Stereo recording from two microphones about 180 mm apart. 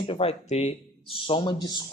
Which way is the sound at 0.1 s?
35° left (ahead or behind).